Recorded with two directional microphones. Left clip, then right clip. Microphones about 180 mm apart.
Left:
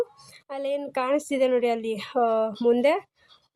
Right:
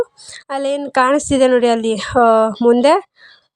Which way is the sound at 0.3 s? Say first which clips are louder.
Right 9 dB; 30° right (ahead or behind).